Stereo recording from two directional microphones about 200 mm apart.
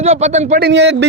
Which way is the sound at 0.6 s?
60° right (ahead or behind).